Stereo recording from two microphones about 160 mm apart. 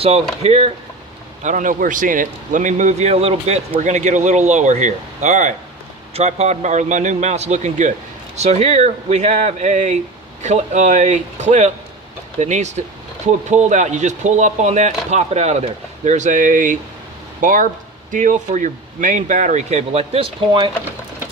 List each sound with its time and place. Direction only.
0.0 s speech: 40° right (ahead or behind)
1.4 s a man's voice: 50° right (ahead or behind)